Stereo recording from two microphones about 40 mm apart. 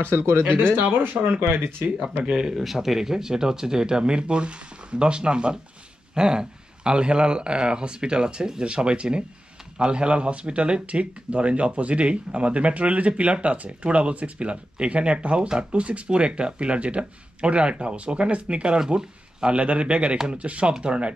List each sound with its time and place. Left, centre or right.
0.5 s speech: right
2.0 s speech: right
2.3 s speech: centre; by 21.1 s right